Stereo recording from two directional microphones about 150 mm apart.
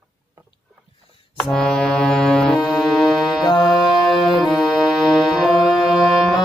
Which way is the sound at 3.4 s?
30° left (ahead or behind).